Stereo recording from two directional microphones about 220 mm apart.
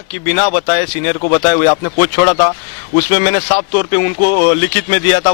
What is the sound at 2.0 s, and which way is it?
Speech, 15° left (ahead or behind).